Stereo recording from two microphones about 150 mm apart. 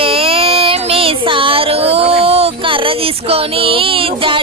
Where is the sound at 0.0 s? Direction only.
40° right (ahead or behind).